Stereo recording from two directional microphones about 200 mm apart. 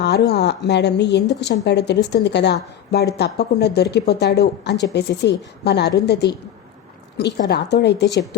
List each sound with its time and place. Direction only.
0.0 s a woman's voice: 55° left (ahead or behind)
7.4 s a woman's voice: 55° left (ahead or behind)